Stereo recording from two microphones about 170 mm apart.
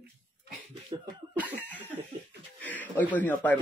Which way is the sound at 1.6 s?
10° left (ahead or behind).